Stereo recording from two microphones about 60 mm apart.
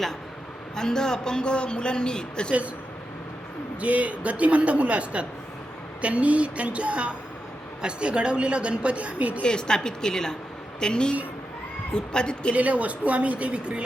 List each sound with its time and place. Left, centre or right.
0.8 s a man's voice: centre
3.8 s a woman's voice: right
9.4 s a man's voice: centre
12.5 s a woman's voice: right